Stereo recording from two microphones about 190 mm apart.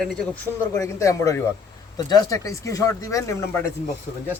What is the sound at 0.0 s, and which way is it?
Speech, centre (ahead or behind).